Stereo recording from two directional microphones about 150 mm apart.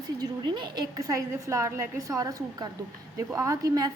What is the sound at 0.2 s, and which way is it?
A woman's voice, 30° right (ahead or behind).